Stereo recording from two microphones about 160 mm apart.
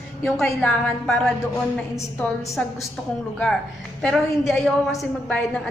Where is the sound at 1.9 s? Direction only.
20° left (ahead or behind).